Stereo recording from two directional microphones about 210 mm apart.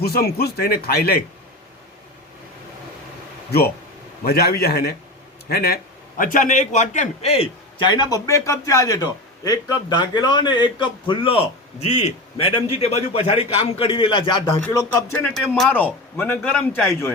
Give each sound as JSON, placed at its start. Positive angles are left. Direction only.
{"t": 0.0, "sound": "speech", "side_deg": 50}
{"t": 4.2, "sound": "a man's voice", "side_deg": 45}
{"t": 7.9, "sound": "a man's voice", "side_deg": 20}
{"t": 14.6, "sound": "a man's voice", "side_deg": 10}